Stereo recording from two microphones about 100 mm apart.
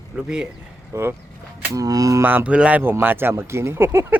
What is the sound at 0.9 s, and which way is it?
Speech, 30° right (ahead or behind).